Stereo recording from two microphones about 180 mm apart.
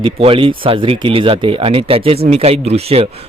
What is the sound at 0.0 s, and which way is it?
Speech, 30° right (ahead or behind).